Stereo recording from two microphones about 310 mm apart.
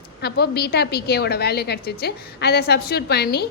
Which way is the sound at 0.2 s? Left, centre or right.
Left.